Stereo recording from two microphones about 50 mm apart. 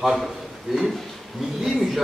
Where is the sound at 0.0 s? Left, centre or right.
Centre.